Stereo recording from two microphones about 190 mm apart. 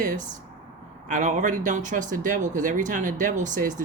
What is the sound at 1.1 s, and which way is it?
Speech, 40° right (ahead or behind).